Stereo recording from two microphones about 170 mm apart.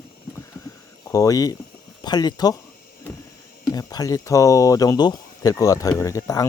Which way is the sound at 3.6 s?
20° left (ahead or behind).